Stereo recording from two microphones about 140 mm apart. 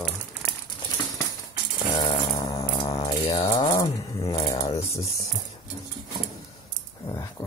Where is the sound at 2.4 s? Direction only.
25° left (ahead or behind).